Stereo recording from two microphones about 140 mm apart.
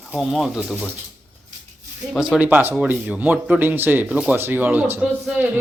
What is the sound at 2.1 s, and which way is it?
Speech, 5° right (ahead or behind).